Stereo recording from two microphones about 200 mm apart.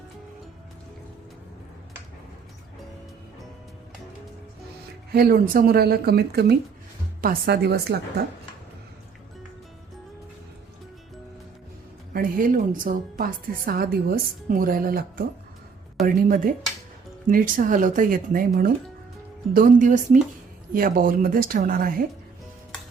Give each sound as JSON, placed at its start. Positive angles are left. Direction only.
{"t": 5.1, "sound": "a woman's voice", "side_deg": -50}
{"t": 12.1, "sound": "a woman's voice", "side_deg": -45}
{"t": 16.0, "sound": "a woman's voice", "side_deg": 0}
{"t": 17.2, "sound": "a woman's voice", "side_deg": -40}